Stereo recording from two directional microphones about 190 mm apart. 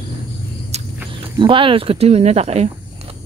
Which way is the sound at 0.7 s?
35° right (ahead or behind).